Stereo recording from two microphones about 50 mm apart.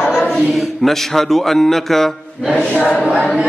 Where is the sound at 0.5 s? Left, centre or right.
Centre.